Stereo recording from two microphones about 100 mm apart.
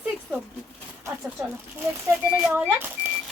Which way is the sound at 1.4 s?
25° right (ahead or behind).